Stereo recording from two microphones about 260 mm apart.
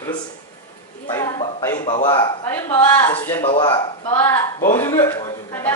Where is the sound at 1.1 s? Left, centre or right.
Centre.